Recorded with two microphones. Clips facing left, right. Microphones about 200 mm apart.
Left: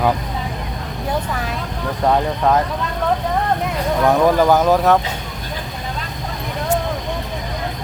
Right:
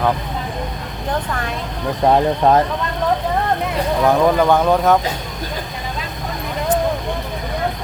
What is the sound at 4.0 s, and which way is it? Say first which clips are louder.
Speech: even; centre (ahead or behind).